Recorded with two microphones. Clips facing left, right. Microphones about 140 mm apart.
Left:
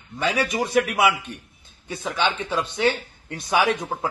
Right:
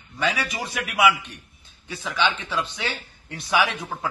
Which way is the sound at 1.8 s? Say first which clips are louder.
Left 1 dB; 50° left (ahead or behind).